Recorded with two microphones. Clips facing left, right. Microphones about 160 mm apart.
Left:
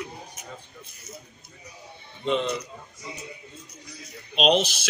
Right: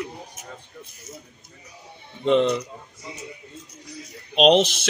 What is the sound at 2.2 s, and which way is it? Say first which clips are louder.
Speech: right 7 dB; 70° right (ahead or behind).